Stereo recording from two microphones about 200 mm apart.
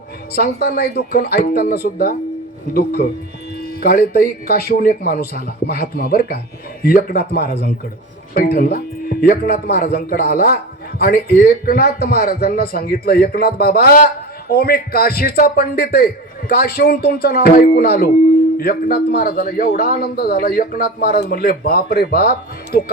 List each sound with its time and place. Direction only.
0.3 s speech: 50° left (ahead or behind)